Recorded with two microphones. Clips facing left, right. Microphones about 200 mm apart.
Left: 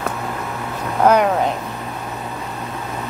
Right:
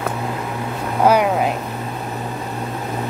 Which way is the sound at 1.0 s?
10° right (ahead or behind).